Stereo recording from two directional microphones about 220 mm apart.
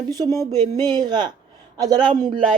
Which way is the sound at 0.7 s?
20° right (ahead or behind).